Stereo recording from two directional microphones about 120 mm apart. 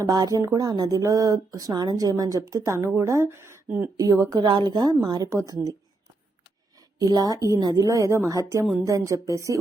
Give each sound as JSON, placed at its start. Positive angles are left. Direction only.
{"t": 0.0, "sound": "speech", "side_deg": -30}
{"t": 4.4, "sound": "a woman's voice", "side_deg": -40}
{"t": 6.7, "sound": "a woman's voice", "side_deg": -35}